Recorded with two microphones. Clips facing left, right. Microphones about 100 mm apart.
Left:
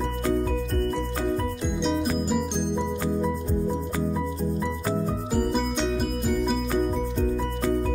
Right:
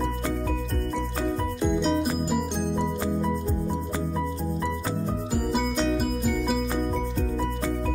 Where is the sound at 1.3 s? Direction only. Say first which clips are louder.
Right 1 dB; centre (ahead or behind).